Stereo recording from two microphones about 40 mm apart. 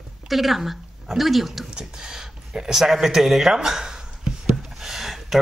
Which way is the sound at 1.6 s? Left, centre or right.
Centre.